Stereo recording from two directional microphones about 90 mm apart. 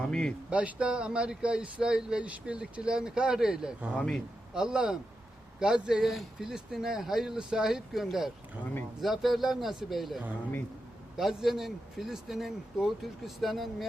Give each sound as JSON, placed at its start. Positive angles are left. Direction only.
{"t": 0.0, "sound": "speech", "side_deg": 10}
{"t": 0.5, "sound": "speech", "side_deg": -10}